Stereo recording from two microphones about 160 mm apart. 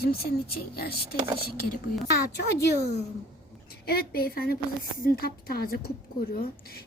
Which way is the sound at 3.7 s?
75° left (ahead or behind).